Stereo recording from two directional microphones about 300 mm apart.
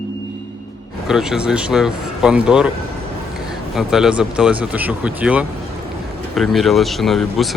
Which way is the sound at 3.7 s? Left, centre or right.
Centre.